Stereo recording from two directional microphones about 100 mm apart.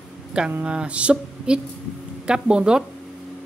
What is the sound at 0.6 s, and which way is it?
Music, 10° right (ahead or behind).